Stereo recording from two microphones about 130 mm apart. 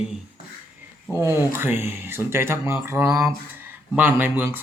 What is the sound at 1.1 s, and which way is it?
Speech, 20° right (ahead or behind).